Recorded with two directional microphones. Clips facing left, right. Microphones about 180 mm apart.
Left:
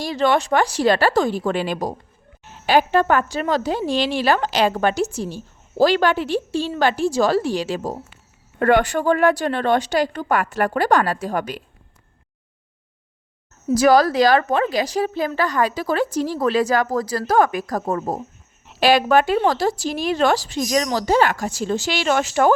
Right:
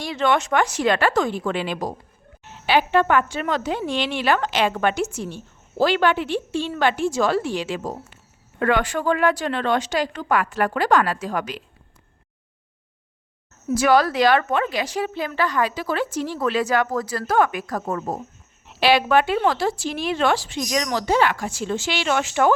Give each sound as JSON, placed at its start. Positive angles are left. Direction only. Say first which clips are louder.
{"t": 0.0, "sound": "speech", "louder": "left 2 dB", "side_deg": 35}
{"t": 8.5, "sound": "speech", "louder": "left 4 dB", "side_deg": 45}
{"t": 13.7, "sound": "speech", "louder": "left 3 dB", "side_deg": 40}